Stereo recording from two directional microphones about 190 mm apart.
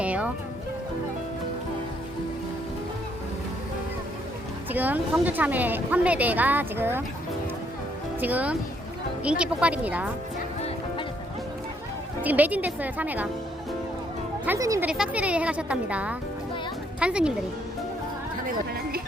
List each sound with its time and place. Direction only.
0.0 s music: 5° right (ahead or behind)
4.7 s a woman's voice: 10° right (ahead or behind)
8.2 s a woman's voice: 10° right (ahead or behind)
12.2 s a woman's voice: 10° right (ahead or behind)
14.4 s a woman's voice: 15° right (ahead or behind)
18.4 s music: 50° right (ahead or behind)